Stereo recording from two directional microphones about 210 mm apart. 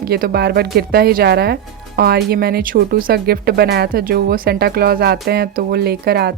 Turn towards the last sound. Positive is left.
turn(degrees=-50)  # may be behind; listen again after turning